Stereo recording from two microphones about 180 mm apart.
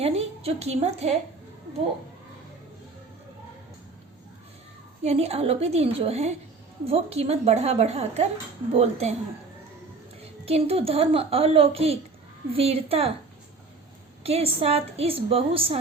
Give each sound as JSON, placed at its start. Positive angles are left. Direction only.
{"t": 0.0, "sound": "a woman's voice", "side_deg": -35}
{"t": 5.0, "sound": "a woman's voice", "side_deg": -35}
{"t": 10.4, "sound": "a woman's voice", "side_deg": -35}
{"t": 14.3, "sound": "a woman's voice", "side_deg": -35}